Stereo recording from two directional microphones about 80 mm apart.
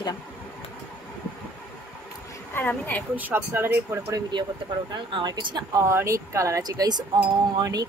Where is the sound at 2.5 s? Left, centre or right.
Left.